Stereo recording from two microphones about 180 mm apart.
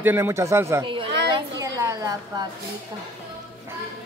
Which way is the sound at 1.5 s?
20° right (ahead or behind).